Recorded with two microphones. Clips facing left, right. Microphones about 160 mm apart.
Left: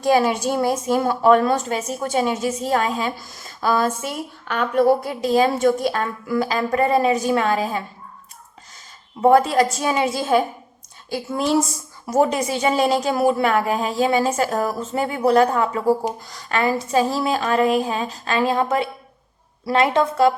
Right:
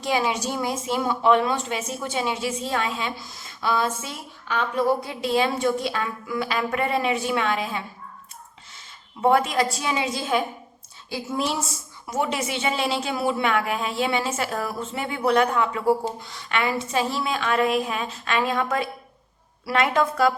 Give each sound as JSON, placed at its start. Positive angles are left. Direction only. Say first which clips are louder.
{"t": 0.0, "sound": "a woman's voice", "louder": "left 6 dB", "side_deg": 50}
{"t": 9.2, "sound": "a woman's voice", "louder": "left 5 dB", "side_deg": 40}
{"t": 12.1, "sound": "a woman's voice", "louder": "left 7 dB", "side_deg": 40}